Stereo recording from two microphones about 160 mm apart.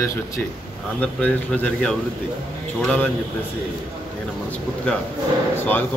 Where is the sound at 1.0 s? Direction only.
5° left (ahead or behind).